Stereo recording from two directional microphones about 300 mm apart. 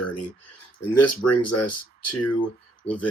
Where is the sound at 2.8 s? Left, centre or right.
Centre.